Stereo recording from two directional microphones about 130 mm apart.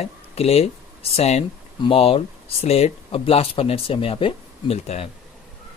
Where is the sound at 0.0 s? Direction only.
50° left (ahead or behind).